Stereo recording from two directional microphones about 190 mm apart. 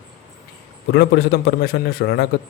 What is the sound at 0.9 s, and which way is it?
A man's voice, 60° left (ahead or behind).